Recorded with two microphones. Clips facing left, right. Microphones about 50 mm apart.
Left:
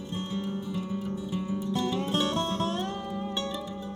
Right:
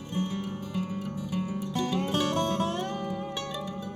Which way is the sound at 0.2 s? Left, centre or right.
Right.